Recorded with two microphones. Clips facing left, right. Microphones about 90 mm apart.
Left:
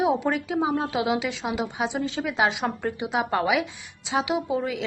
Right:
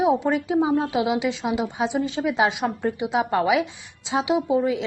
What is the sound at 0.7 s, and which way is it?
Speech, 25° left (ahead or behind).